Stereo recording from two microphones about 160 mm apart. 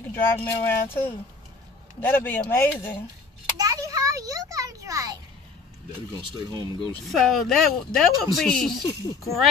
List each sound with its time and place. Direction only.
0.1 s speech: 15° left (ahead or behind)
3.5 s a sound: 20° right (ahead or behind)
6.2 s speech: 30° right (ahead or behind)
7.1 s speech: centre (ahead or behind)